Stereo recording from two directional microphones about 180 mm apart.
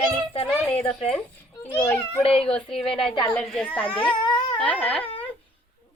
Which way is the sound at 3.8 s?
25° left (ahead or behind).